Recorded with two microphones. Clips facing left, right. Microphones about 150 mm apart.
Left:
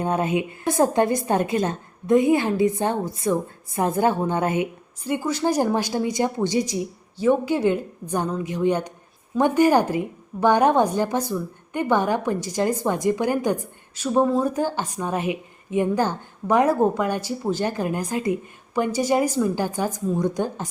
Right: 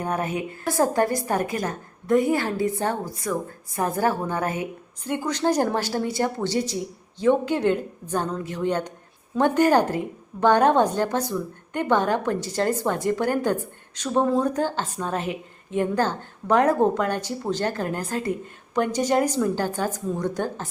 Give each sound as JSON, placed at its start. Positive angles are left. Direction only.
{"t": 0.0, "sound": "a woman's voice", "side_deg": 20}
{"t": 5.0, "sound": "a woman's voice", "side_deg": 10}